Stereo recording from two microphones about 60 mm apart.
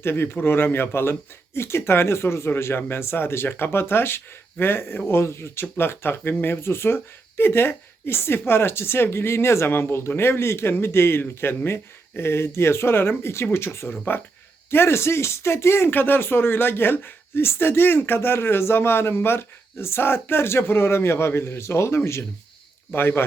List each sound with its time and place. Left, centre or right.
0.0 s speech: left
22.9 s speech: left